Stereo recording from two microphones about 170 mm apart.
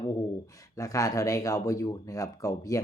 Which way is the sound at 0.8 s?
20° left (ahead or behind).